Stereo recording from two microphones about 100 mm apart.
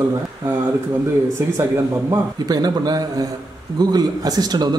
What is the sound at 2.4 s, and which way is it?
A man's voice, 40° right (ahead or behind).